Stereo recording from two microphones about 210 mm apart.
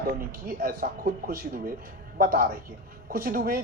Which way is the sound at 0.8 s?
40° right (ahead or behind).